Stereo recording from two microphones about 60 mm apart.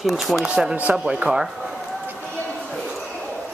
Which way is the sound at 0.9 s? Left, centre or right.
Centre.